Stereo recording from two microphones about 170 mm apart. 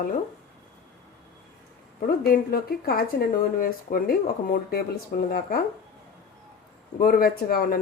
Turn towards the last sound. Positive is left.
turn(degrees=60)  # may be behind; listen again after turning